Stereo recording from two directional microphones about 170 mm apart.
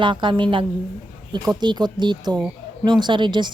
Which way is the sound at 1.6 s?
25° right (ahead or behind).